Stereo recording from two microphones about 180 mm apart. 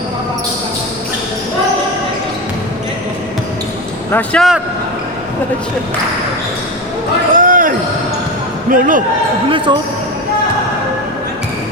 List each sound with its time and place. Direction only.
4.1 s a man's voice: 5° left (ahead or behind)
7.3 s basketball bounce: 50° right (ahead or behind)
8.7 s speech: 50° right (ahead or behind)
9.5 s speech: 25° right (ahead or behind)